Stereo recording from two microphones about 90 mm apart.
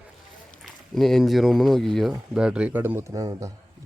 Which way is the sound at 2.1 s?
10° right (ahead or behind).